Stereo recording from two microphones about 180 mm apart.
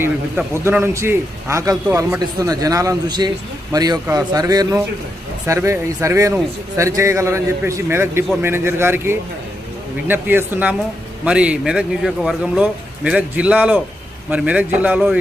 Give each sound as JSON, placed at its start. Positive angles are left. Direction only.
{"t": 0.0, "sound": "a man's voice", "side_deg": -15}